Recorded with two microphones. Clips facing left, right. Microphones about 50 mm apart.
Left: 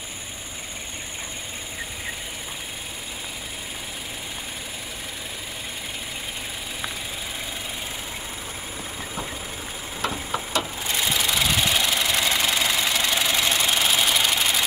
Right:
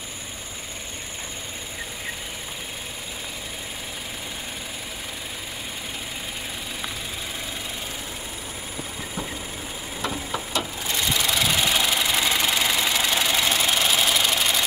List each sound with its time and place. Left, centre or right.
10.6 s engine: centre